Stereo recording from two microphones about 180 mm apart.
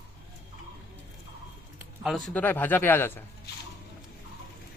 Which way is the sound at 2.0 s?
Centre (ahead or behind).